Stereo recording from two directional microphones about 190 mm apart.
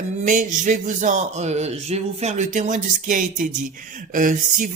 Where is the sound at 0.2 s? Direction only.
40° right (ahead or behind).